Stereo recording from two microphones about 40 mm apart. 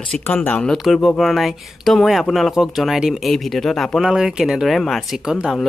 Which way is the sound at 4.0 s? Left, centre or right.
Centre.